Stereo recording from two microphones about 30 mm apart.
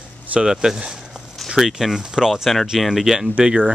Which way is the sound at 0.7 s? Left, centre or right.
Right.